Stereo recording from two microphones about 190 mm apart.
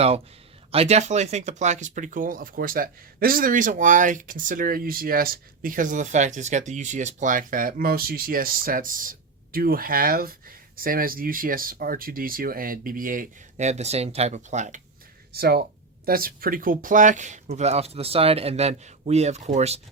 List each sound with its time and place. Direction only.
0.7 s speech: 35° right (ahead or behind)
15.3 s speech: 55° right (ahead or behind); by 19.8 s 35° right (ahead or behind)